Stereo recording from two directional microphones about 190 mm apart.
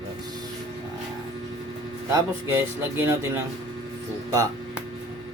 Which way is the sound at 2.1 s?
10° right (ahead or behind).